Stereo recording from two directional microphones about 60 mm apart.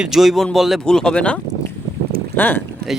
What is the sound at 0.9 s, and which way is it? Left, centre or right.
Speech, centre.